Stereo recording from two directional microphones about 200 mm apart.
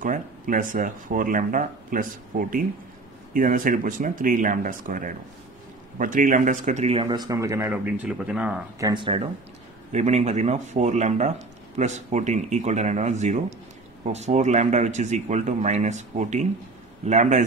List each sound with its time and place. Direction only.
0.0 s speech: 40° right (ahead or behind); by 8.5 s 5° right (ahead or behind)
8.7 s speech: 20° right (ahead or behind); by 17.5 s 35° right (ahead or behind)